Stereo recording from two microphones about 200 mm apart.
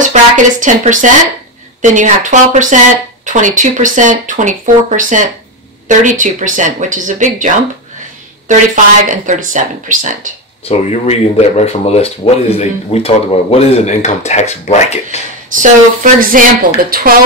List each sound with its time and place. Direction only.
0.0 s speech: 40° right (ahead or behind)
10.6 s speech: 30° left (ahead or behind)
15.5 s speech: 40° right (ahead or behind)